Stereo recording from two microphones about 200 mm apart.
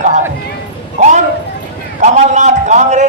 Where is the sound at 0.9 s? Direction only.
35° right (ahead or behind).